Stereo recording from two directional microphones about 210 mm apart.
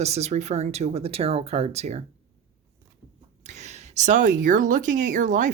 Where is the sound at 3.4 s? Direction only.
35° right (ahead or behind).